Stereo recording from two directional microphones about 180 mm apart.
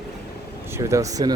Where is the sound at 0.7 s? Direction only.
15° right (ahead or behind).